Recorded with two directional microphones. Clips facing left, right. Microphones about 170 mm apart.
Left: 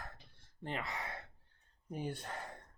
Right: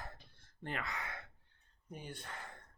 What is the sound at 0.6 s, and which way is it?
Speech, 30° left (ahead or behind).